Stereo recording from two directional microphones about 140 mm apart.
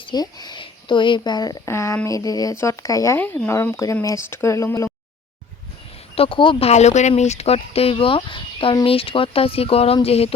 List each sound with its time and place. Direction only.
0.0 s speech: 30° left (ahead or behind)
6.1 s speech: 40° left (ahead or behind)